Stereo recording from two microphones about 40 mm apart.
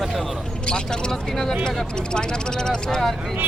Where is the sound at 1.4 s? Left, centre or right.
Centre.